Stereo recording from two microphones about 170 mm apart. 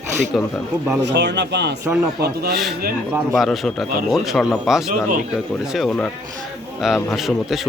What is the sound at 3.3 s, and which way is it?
A man's voice, centre (ahead or behind).